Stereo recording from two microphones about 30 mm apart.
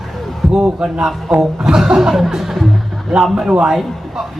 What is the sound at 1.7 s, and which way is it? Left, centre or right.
Music, centre.